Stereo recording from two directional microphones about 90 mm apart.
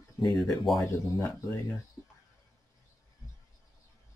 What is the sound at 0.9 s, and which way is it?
Speech, 30° left (ahead or behind).